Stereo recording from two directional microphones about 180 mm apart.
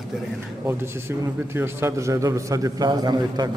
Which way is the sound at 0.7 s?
15° right (ahead or behind).